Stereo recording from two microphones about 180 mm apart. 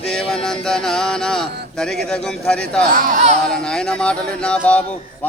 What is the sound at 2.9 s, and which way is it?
Speech, 50° right (ahead or behind).